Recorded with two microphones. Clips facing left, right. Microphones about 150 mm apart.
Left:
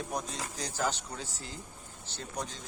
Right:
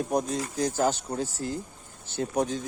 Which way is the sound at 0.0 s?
50° right (ahead or behind).